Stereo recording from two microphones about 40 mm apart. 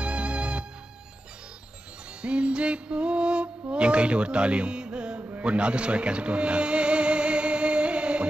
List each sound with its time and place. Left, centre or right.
0.0 s music: right
2.2 s music: right
3.7 s speech: right
5.4 s music: right